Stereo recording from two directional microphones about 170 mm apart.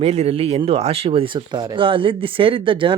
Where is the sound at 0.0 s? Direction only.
40° right (ahead or behind).